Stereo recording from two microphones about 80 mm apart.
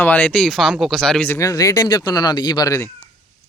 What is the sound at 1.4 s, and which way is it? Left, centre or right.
Speech, left.